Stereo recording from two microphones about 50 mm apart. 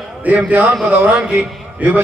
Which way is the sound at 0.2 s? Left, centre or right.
Right.